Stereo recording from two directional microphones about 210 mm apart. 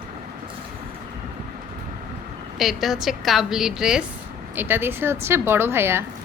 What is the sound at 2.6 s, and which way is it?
A woman's voice, centre (ahead or behind).